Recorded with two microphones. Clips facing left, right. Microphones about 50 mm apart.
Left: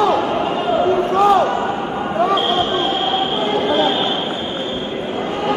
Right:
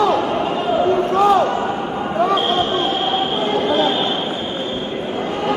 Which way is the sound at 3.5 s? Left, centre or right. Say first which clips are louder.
Even; centre.